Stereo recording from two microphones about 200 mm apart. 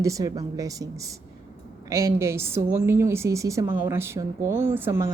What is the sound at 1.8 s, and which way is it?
A woman's voice, 15° right (ahead or behind).